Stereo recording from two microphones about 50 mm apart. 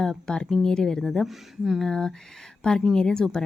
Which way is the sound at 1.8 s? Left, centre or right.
Centre.